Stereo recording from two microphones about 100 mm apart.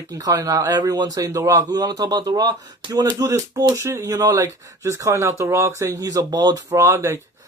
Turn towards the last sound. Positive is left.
turn(degrees=-25)  # may be behind; listen again after turning